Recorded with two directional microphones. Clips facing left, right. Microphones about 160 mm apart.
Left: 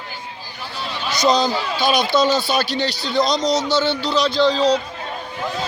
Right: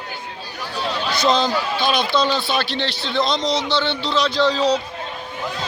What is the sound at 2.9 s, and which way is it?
Speech, 40° left (ahead or behind).